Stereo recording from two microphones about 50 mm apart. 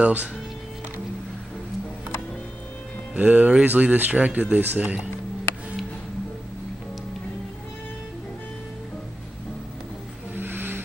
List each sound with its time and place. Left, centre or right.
0.0 s speech: right
3.2 s speech: right
10.3 s music: right